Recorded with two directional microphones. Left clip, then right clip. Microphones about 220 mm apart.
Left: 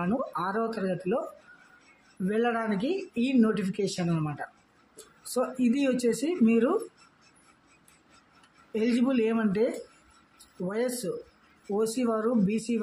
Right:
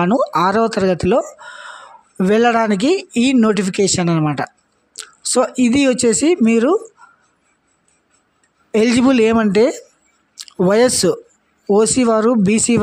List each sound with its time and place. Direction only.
0.0 s speech: 45° right (ahead or behind)
2.2 s speech: 45° right (ahead or behind)
8.7 s speech: 45° right (ahead or behind)
11.7 s speech: 45° right (ahead or behind)